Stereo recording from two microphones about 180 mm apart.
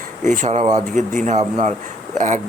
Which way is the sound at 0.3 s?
40° right (ahead or behind).